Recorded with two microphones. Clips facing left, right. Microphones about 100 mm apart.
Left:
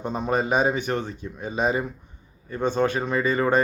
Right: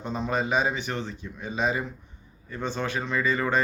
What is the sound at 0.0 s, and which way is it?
Speech, 50° left (ahead or behind).